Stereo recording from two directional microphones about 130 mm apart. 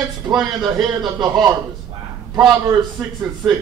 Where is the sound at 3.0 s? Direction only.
Centre (ahead or behind).